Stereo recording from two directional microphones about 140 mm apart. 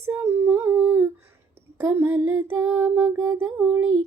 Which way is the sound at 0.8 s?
10° right (ahead or behind).